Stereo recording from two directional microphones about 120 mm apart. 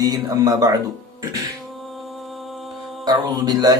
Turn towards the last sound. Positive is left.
turn(degrees=-30)  # may be behind; listen again after turning